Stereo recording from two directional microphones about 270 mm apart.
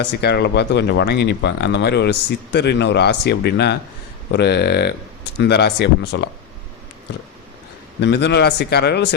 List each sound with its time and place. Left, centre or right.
0.0 s speech: left
8.0 s speech: left